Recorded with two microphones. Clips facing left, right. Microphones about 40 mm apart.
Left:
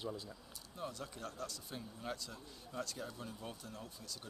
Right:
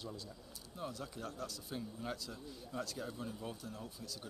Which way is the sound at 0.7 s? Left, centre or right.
Centre.